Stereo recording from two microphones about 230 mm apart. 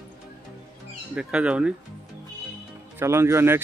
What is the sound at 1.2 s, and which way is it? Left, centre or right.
Speech, centre.